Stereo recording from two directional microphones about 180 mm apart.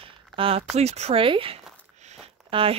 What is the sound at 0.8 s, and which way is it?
Speech, 35° right (ahead or behind).